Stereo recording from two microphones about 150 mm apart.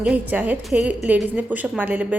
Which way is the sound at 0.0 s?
10° right (ahead or behind).